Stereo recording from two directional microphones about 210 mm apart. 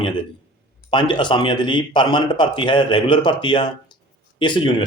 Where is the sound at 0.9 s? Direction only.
20° left (ahead or behind).